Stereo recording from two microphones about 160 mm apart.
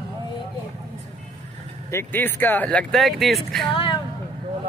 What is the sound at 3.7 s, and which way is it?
Speech, 35° left (ahead or behind).